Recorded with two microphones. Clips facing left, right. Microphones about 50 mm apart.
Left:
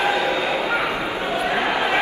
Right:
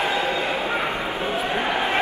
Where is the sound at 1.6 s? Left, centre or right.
Left.